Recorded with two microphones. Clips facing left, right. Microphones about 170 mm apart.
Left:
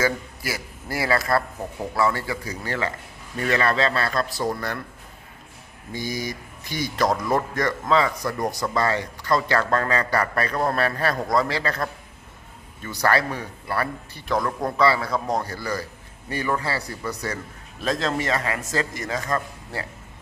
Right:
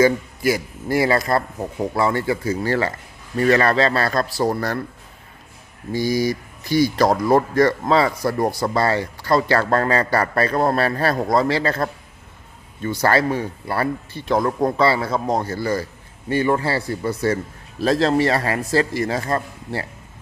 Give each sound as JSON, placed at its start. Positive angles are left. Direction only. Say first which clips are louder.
{"t": 0.0, "sound": "speech", "louder": "right 8 dB", "side_deg": -20}
{"t": 5.9, "sound": "speech", "louder": "right 9 dB", "side_deg": -35}